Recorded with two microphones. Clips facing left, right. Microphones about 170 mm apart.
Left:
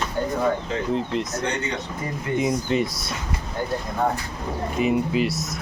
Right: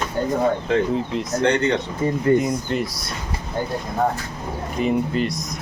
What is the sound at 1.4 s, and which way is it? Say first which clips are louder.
Speech: right 8 dB; 65° right (ahead or behind).